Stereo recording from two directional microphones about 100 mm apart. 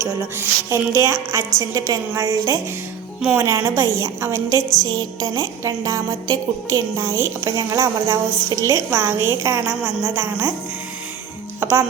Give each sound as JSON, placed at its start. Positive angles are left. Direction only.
{"t": 0.0, "sound": "a woman's voice", "side_deg": -30}
{"t": 11.6, "sound": "speech", "side_deg": -25}